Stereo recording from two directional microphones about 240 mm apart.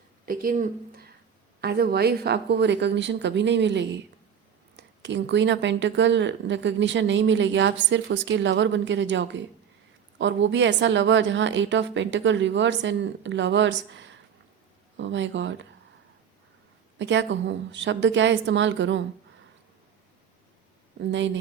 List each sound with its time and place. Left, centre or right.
0.3 s a woman's voice: right
17.0 s a woman's voice: right
21.0 s a woman's voice: right